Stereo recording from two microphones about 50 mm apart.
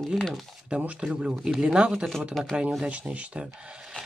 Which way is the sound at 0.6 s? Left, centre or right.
Right.